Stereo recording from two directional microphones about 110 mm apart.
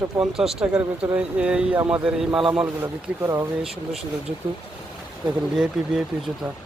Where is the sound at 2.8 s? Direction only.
25° right (ahead or behind).